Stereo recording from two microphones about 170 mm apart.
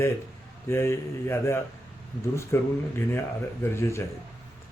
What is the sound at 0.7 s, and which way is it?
Speech, 15° left (ahead or behind).